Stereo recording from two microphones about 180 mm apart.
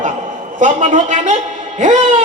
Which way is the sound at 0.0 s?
45° right (ahead or behind).